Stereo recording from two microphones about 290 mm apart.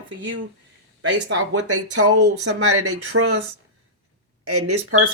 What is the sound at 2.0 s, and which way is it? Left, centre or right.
Speech, right.